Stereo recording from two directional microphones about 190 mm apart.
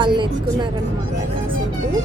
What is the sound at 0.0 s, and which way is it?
Speech, 25° right (ahead or behind).